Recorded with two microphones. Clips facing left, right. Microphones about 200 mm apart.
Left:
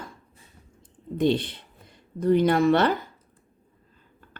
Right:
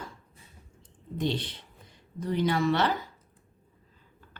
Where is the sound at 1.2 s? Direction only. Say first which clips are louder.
Left 8 dB; 55° left (ahead or behind).